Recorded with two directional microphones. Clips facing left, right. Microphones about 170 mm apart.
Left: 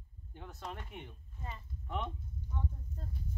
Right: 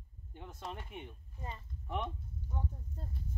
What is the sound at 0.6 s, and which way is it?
Speech, 5° right (ahead or behind).